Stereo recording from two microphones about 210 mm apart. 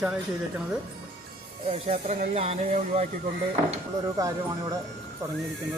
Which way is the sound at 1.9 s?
30° right (ahead or behind).